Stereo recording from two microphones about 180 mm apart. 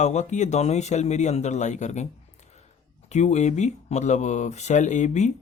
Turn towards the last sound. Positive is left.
turn(degrees=40)  # may be behind; listen again after turning